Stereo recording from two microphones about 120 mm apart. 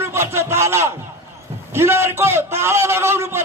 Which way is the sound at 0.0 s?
20° right (ahead or behind).